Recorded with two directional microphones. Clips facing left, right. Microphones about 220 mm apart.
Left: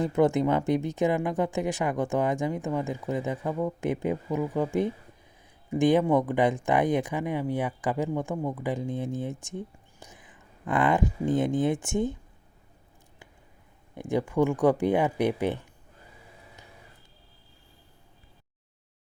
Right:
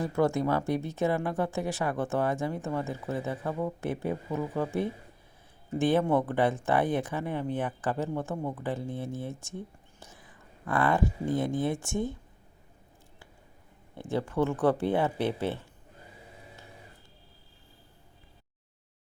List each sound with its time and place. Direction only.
0.0 s speech: 20° left (ahead or behind)
13.9 s speech: 15° left (ahead or behind)